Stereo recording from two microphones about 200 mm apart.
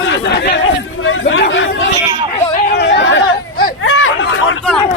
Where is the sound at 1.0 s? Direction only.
80° left.